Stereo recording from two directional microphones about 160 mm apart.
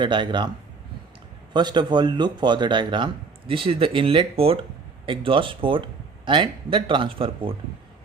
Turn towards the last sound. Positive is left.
turn(degrees=-35)  # may be behind; listen again after turning